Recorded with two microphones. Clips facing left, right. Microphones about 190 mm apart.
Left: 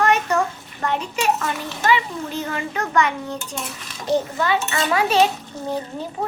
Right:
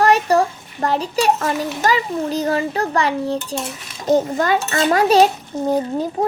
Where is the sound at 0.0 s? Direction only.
35° right (ahead or behind).